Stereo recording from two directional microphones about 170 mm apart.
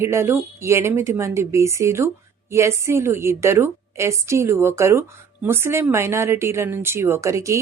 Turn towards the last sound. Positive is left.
turn(degrees=-15)  # may be behind; listen again after turning